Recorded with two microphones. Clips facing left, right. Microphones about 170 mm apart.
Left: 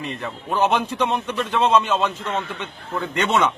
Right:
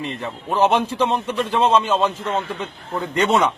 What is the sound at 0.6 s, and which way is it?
A man's voice, 30° right (ahead or behind).